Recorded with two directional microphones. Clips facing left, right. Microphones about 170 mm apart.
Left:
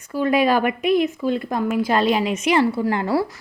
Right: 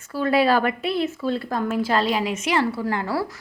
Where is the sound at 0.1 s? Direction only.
15° left (ahead or behind).